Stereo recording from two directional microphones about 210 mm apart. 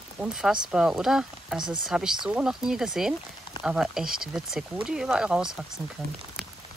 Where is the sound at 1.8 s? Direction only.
5° right (ahead or behind).